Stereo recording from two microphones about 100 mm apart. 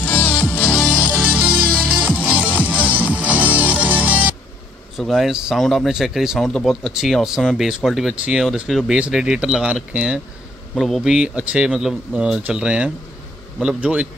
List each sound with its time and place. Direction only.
0.0 s music: 20° left (ahead or behind)
0.8 s music: 10° right (ahead or behind)
4.9 s speech: 5° right (ahead or behind)